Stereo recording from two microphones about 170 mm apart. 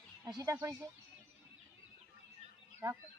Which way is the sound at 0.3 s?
20° right (ahead or behind).